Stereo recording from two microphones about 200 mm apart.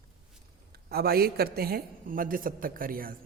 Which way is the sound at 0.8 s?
50° right (ahead or behind).